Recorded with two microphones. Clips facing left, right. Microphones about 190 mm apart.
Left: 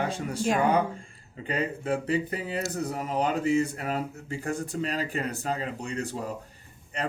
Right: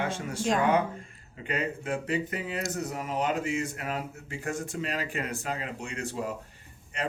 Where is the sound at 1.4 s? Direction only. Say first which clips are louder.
Left 2 dB; 30° left (ahead or behind).